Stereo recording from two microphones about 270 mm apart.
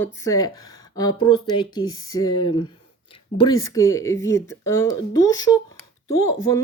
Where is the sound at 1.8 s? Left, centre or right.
Left.